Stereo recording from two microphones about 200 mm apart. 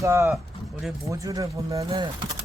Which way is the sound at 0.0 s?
15° right (ahead or behind).